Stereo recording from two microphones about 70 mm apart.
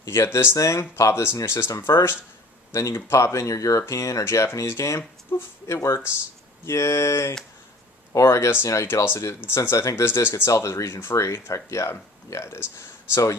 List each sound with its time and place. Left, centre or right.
0.2 s speech: left
10.5 s speech: left